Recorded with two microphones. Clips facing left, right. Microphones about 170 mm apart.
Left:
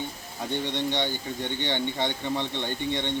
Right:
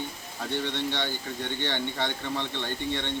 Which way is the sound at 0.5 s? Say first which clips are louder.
Left 2 dB; 15° left (ahead or behind).